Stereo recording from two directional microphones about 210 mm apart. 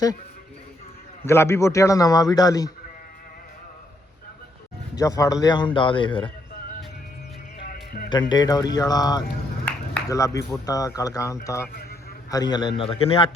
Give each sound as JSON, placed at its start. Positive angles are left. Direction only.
{"t": 1.2, "sound": "speech", "side_deg": 10}
{"t": 4.9, "sound": "a man's voice", "side_deg": 15}
{"t": 7.7, "sound": "music", "side_deg": 45}
{"t": 8.1, "sound": "a man's voice", "side_deg": 20}
{"t": 9.6, "sound": "a sound", "side_deg": 10}
{"t": 10.7, "sound": "a man's voice", "side_deg": 15}